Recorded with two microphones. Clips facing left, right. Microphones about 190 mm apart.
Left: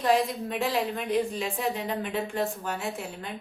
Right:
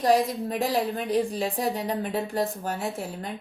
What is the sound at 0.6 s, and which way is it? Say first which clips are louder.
Speech: right 2 dB; 35° right (ahead or behind).